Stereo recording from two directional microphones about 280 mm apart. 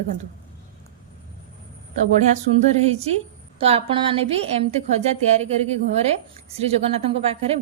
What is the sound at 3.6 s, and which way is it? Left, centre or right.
A woman's voice, centre.